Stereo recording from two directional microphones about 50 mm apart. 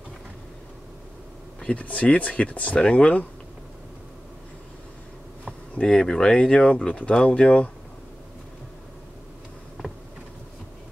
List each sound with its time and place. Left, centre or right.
1.6 s speech: left
5.4 s speech: centre